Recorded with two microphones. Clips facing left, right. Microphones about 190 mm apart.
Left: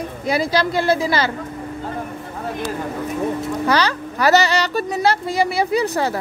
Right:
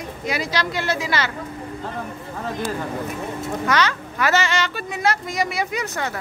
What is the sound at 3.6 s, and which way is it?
Speech, 35° left (ahead or behind).